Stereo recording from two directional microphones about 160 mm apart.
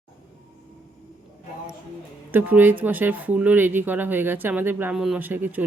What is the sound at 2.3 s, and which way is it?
Speech, 10° right (ahead or behind).